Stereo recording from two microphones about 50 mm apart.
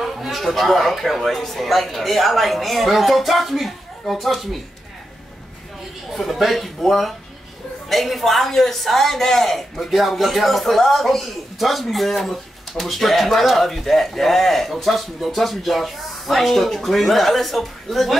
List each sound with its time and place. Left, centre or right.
0.0 s a man's voice: centre
6.1 s a man's voice: centre